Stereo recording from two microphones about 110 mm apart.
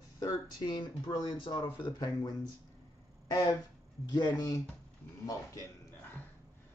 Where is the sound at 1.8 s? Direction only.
40° left (ahead or behind).